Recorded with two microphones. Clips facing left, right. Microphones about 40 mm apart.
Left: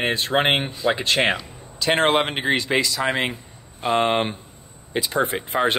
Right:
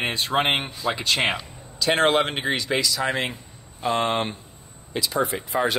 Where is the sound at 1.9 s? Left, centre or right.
Left.